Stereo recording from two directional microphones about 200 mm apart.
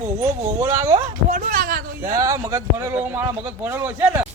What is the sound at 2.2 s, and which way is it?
Speech, 15° right (ahead or behind).